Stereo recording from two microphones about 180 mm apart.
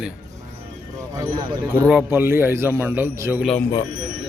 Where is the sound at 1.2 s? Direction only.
15° right (ahead or behind).